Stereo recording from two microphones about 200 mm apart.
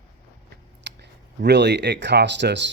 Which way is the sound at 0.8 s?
60° right (ahead or behind).